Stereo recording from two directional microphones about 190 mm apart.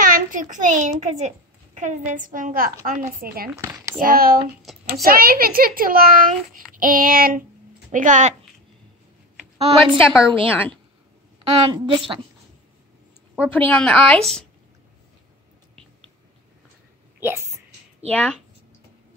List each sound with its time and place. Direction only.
0.0 s a child's voice: 45° right (ahead or behind)
3.6 s a sound: 15° right (ahead or behind)
4.0 s a woman's voice: 50° right (ahead or behind)
4.7 s a sound: centre (ahead or behind)
5.0 s a woman's voice: 50° right (ahead or behind)
9.6 s a woman's voice: 30° right (ahead or behind)
9.9 s a woman's voice: 15° left (ahead or behind)
11.5 s a woman's voice: 25° right (ahead or behind)
13.5 s speech: 10° left (ahead or behind)
17.2 s a sound: 15° right (ahead or behind)
18.1 s speech: 5° left (ahead or behind)